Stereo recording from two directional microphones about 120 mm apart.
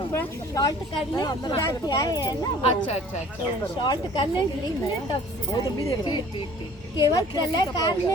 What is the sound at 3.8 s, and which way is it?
Speech, 40° left (ahead or behind).